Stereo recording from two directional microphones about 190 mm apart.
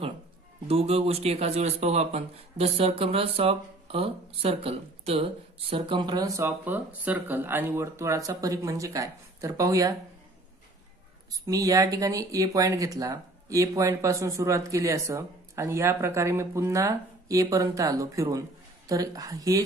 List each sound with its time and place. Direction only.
0.7 s speech: 30° right (ahead or behind)
11.4 s speech: 20° right (ahead or behind)